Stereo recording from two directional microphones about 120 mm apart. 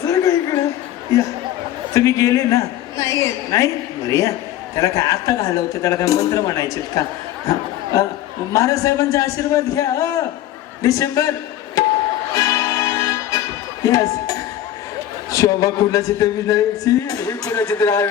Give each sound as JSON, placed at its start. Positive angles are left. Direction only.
{"t": 0.0, "sound": "a sound", "side_deg": 25}
{"t": 1.9, "sound": "a man's voice", "side_deg": 25}
{"t": 12.3, "sound": "music", "side_deg": 25}
{"t": 13.8, "sound": "a man's voice", "side_deg": 30}